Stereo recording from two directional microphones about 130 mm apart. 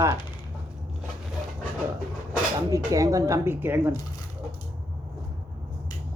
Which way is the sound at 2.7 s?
25° right (ahead or behind).